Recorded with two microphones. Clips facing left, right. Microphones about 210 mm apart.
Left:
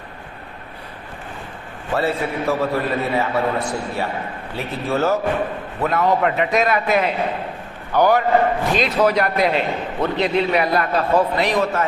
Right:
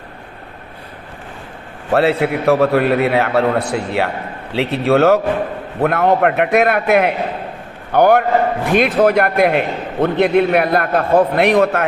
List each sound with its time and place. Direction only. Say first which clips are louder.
1.9 s a man's voice: right 7 dB; 70° right (ahead or behind)
5.8 s a man's voice: right 4 dB; 60° right (ahead or behind)